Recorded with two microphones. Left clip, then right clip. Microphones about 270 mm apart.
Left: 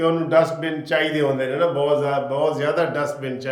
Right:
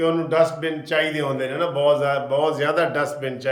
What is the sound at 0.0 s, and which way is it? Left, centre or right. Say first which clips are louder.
A man's voice: left 1 dB; centre.